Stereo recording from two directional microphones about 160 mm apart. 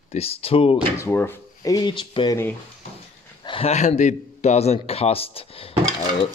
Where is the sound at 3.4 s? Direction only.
40° left (ahead or behind).